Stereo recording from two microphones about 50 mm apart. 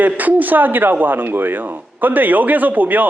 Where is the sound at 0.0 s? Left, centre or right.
Right.